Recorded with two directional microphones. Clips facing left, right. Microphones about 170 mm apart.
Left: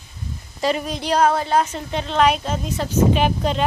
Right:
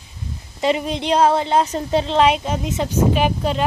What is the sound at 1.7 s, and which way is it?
Speech, 35° right (ahead or behind).